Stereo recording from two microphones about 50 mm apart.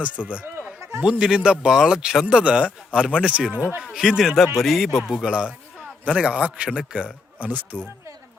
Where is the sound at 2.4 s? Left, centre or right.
Right.